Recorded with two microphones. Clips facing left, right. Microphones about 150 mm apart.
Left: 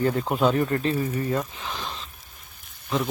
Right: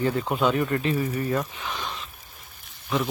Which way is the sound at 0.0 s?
40° left (ahead or behind).